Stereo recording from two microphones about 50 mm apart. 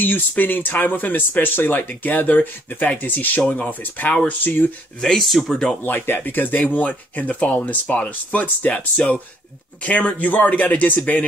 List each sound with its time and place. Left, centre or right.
0.0 s speech: left
5.5 s speech: centre
5.9 s speech: left